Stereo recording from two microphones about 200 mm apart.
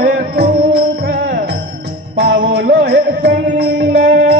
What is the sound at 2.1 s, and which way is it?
Music, 55° right (ahead or behind).